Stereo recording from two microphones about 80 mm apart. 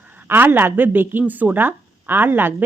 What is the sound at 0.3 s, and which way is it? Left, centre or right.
A woman's voice, right.